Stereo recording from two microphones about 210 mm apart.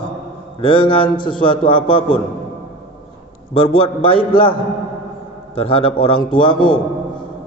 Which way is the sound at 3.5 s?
25° left (ahead or behind).